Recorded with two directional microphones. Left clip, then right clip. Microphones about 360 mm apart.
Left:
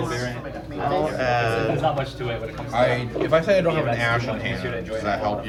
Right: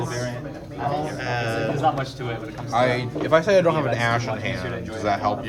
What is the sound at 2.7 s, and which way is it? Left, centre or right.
A man's voice, centre.